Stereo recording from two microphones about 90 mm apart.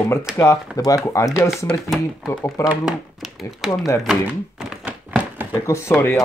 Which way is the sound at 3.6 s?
5° right (ahead or behind).